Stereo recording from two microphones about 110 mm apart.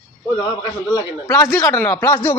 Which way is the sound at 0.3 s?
35° left (ahead or behind).